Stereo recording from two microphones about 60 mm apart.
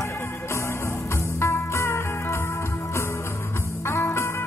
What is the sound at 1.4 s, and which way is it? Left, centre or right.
Music, left.